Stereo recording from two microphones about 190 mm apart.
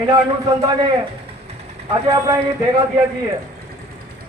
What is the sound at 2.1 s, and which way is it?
Speech, 20° right (ahead or behind).